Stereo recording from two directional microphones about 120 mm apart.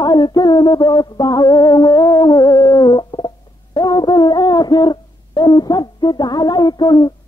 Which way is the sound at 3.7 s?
35° left (ahead or behind).